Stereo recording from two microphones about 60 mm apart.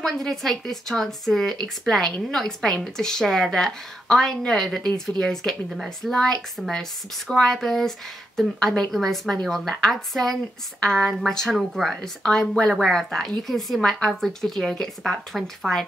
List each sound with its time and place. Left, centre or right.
0.0 s a woman's voice: centre
12.2 s a woman's voice: centre